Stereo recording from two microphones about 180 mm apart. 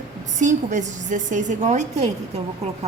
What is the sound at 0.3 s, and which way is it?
A woman's voice, 45° right (ahead or behind).